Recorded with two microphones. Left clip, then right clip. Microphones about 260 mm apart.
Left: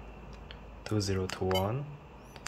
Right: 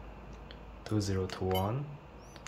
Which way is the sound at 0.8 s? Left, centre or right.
Centre.